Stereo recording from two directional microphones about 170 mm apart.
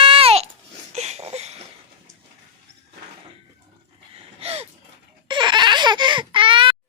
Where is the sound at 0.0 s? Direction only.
35° right (ahead or behind).